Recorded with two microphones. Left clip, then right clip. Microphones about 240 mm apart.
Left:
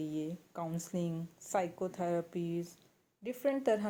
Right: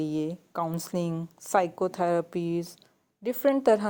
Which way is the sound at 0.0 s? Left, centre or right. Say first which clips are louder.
Right 9 dB; right.